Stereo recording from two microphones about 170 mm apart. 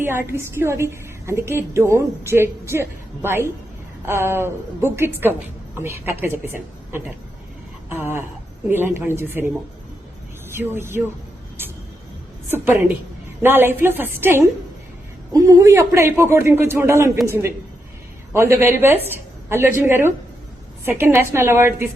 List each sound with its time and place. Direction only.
0.0 s a woman's voice: 15° right (ahead or behind)
10.5 s a woman's voice: 15° right (ahead or behind)
13.4 s a woman's voice: 15° right (ahead or behind)